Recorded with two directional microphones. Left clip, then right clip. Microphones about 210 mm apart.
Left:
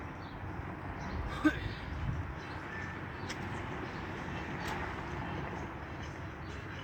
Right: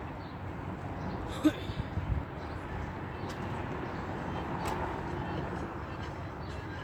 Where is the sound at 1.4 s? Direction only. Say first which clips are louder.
Right 2 dB; 15° left (ahead or behind).